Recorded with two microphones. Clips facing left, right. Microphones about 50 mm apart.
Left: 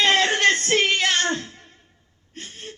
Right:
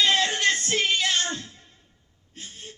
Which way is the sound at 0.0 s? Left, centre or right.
Left.